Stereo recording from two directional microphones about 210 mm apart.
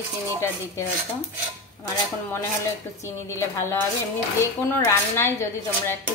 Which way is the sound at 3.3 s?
10° left (ahead or behind).